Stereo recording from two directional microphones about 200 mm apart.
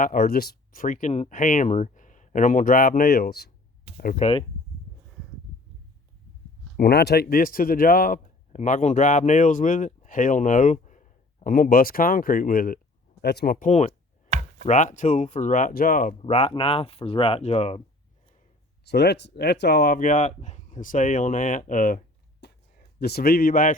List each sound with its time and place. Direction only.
0.0 s speech: 45° left (ahead or behind)
4.0 s speech: 40° left (ahead or behind)
6.7 s speech: 55° left (ahead or behind)
13.7 s speech: 35° left (ahead or behind)
14.3 s a sound: 35° right (ahead or behind)
14.7 s speech: 40° left (ahead or behind)
16.2 s speech: 30° left (ahead or behind)
18.9 s speech: 55° left (ahead or behind)